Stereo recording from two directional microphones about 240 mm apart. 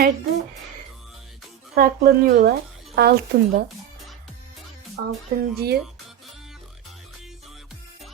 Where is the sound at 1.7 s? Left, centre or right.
Right.